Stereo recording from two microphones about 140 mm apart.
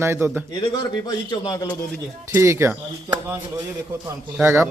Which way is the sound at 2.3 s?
20° right (ahead or behind).